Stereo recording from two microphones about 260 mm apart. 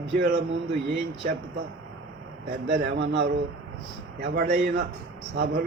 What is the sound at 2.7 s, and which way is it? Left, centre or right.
A man's voice, right.